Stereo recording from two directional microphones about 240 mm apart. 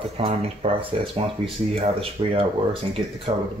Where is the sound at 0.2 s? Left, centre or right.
Right.